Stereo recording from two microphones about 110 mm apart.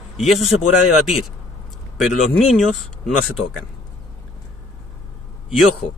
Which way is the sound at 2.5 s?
Centre (ahead or behind).